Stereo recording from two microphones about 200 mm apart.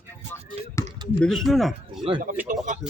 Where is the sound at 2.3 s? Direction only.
45° right (ahead or behind).